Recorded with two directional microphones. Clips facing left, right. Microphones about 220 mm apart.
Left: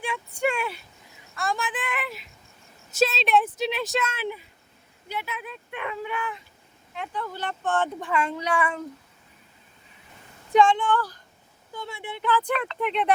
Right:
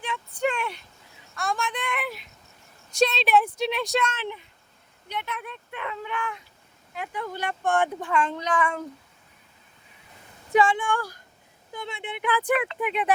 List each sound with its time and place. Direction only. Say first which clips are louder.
0.0 s a sound: left 1 dB; 10° left (ahead or behind)
2.9 s speech: right 1 dB; 5° left (ahead or behind)
5.7 s speech: left 2 dB; 15° left (ahead or behind)
6.1 s speech: even; 5° left (ahead or behind); by 7.9 s 10° right (ahead or behind)
8.0 s speech: even; 5° left (ahead or behind)
10.5 s speech: left 2 dB; 10° right (ahead or behind)
11.7 s speech: right 1 dB; 20° right (ahead or behind); by 13.1 s 5° right (ahead or behind)